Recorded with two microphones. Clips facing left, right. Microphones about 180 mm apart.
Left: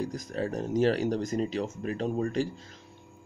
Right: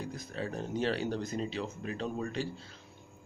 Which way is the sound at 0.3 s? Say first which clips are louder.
Left 5 dB; 40° left (ahead or behind).